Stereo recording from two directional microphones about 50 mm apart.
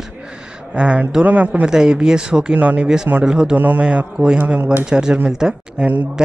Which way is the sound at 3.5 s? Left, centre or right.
Right.